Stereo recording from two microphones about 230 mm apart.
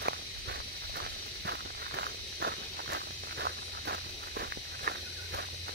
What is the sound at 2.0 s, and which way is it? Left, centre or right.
Walk, right.